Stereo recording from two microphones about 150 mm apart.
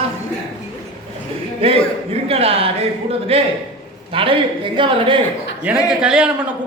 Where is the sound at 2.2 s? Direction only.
40° right (ahead or behind).